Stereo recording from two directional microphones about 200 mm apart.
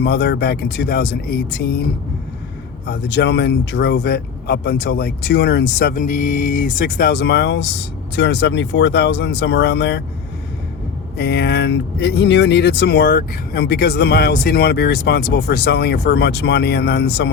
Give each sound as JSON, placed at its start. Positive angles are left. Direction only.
{"t": 0.0, "sound": "speech", "side_deg": 60}
{"t": 2.8, "sound": "speech", "side_deg": 55}
{"t": 11.2, "sound": "speech", "side_deg": 55}